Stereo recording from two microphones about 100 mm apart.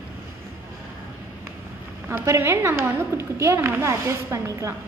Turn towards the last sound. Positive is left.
turn(degrees=-30)  # may be behind; listen again after turning